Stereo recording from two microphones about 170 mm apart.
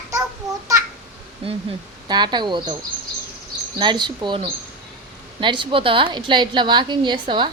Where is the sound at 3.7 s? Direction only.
25° right (ahead or behind).